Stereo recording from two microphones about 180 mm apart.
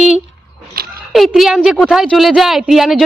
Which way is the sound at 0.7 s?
60° right (ahead or behind).